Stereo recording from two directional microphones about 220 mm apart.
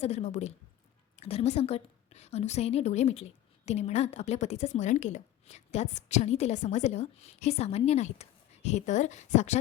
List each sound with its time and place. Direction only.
0.0 s a woman's voice: 30° left (ahead or behind)